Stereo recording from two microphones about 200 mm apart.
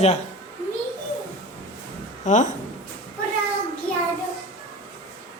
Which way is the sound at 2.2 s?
35° left (ahead or behind).